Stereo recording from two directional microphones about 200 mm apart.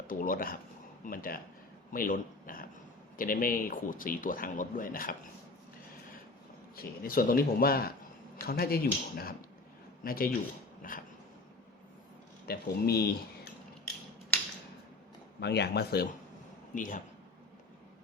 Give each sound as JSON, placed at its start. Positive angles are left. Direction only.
{"t": 0.1, "sound": "a man's voice", "side_deg": 45}
{"t": 6.7, "sound": "a man's voice", "side_deg": 45}
{"t": 12.5, "sound": "speech", "side_deg": 50}
{"t": 15.4, "sound": "speech", "side_deg": 55}
{"t": 16.7, "sound": "a man's voice", "side_deg": 40}